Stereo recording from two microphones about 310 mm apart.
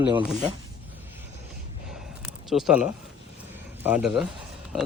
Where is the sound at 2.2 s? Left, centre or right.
Centre.